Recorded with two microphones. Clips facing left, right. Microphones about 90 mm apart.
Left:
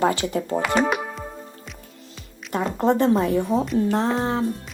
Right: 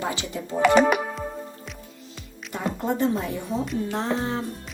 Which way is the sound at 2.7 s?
55° left (ahead or behind).